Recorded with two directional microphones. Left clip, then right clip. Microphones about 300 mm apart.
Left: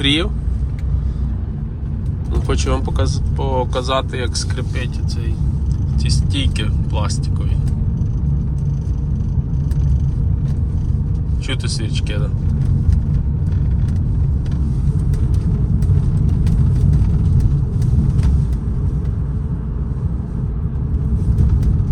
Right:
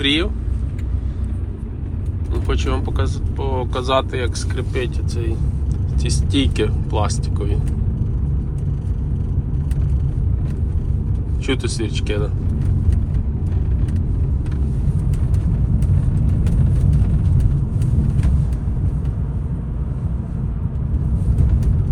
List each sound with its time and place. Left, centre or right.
0.0 s vehicle: centre
2.3 s speech: centre
6.0 s speech: centre
11.4 s speech: centre